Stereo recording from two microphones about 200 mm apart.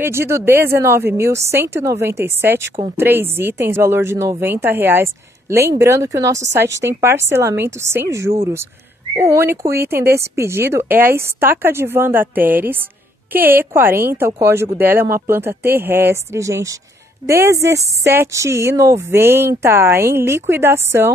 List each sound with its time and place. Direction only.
0.0 s speech: 10° right (ahead or behind)